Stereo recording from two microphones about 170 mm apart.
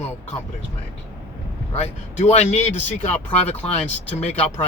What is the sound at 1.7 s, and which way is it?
Speech, 40° left (ahead or behind).